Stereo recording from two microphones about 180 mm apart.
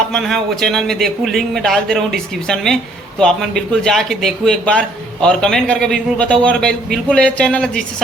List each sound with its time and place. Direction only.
0.1 s a man's voice: centre (ahead or behind)